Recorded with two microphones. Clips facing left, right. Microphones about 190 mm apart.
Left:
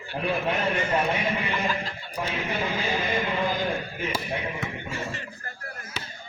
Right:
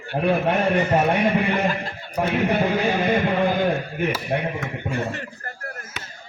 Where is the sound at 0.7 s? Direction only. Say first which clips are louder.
Right 6 dB; 40° right (ahead or behind).